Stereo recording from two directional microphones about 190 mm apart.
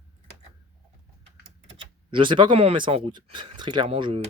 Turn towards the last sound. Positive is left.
turn(degrees=-30)  # may be behind; listen again after turning